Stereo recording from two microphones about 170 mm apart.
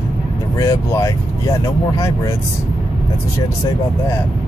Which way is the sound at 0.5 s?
20° left (ahead or behind).